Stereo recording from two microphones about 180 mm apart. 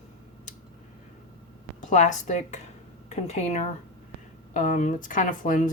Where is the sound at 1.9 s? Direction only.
40° left (ahead or behind).